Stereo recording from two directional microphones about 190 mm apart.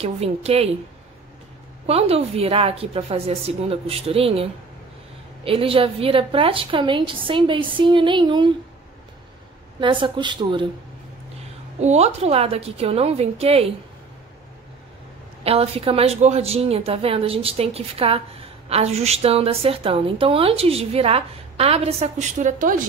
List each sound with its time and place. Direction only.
0.0 s a woman's voice: 30° right (ahead or behind)
1.9 s a woman's voice: 30° right (ahead or behind)
9.8 s a woman's voice: 25° right (ahead or behind)
11.8 s a woman's voice: 35° right (ahead or behind)
15.4 s a woman's voice: 30° right (ahead or behind)